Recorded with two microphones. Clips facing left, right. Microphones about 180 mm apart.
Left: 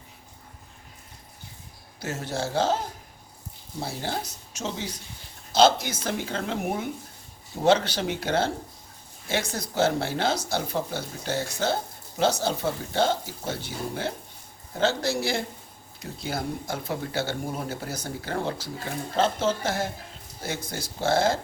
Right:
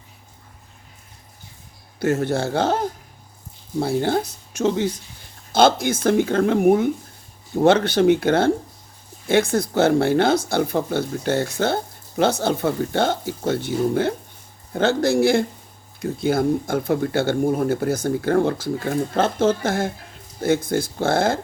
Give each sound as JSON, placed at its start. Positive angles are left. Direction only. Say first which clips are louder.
{"t": 2.0, "sound": "speech", "louder": "right 10 dB", "side_deg": -55}